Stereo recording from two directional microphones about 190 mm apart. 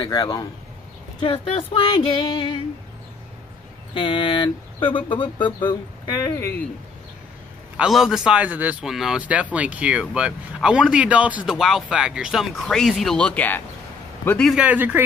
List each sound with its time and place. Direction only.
0.0 s speech: 20° left (ahead or behind)
1.2 s speech: 30° left (ahead or behind)
3.9 s speech: 25° left (ahead or behind)
7.7 s a man's voice: 5° right (ahead or behind)
14.5 s speech: 10° right (ahead or behind)